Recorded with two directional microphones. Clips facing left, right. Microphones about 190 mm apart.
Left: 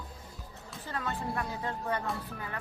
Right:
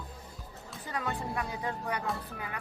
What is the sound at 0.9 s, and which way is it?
Speech, 15° right (ahead or behind).